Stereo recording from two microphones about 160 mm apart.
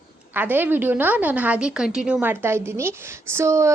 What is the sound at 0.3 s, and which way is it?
A woman's voice, 10° right (ahead or behind).